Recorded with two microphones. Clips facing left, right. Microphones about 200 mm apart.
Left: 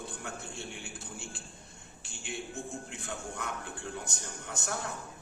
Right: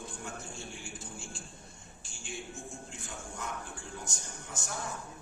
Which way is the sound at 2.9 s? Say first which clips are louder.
Left 4 dB; 65° left (ahead or behind).